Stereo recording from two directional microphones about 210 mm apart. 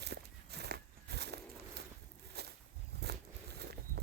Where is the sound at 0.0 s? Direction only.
50° right (ahead or behind).